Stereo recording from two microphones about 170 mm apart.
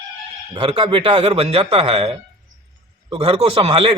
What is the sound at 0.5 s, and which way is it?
Speech, 35° right (ahead or behind).